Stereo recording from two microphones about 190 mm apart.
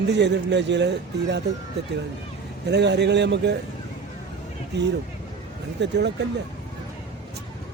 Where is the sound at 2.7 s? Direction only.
65° right (ahead or behind).